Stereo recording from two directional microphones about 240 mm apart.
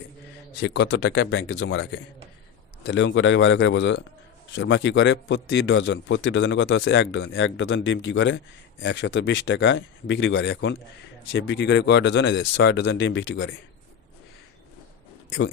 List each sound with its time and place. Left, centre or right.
0.6 s a man's voice: left